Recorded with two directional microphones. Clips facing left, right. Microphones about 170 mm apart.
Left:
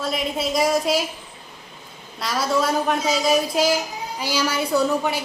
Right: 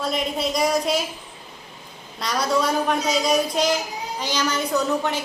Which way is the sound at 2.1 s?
5° left (ahead or behind).